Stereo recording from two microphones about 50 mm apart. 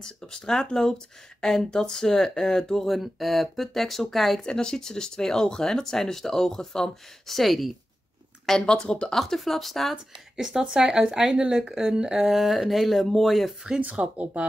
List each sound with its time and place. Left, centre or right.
0.0 s speech: centre
4.4 s speech: centre
8.5 s speech: centre
9.1 s speech: centre
10.3 s speech: centre
12.3 s speech: centre
13.7 s speech: right